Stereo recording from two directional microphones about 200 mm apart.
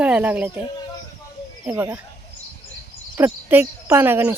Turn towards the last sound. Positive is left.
turn(degrees=-10)  # may be behind; listen again after turning